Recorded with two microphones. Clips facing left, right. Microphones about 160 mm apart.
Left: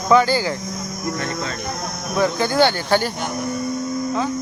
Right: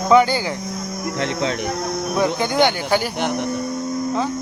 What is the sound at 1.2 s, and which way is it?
Speech, 85° right.